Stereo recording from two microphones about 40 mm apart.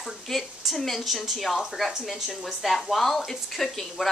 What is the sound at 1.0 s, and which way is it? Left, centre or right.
A woman's voice, centre.